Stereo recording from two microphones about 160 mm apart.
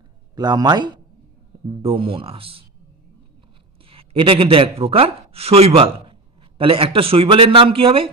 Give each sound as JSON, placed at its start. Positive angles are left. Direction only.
{"t": 0.4, "sound": "a man's voice", "side_deg": -25}
{"t": 3.9, "sound": "a man's voice", "side_deg": -35}